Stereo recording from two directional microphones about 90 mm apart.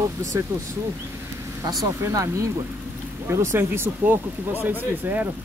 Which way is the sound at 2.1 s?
35° right (ahead or behind).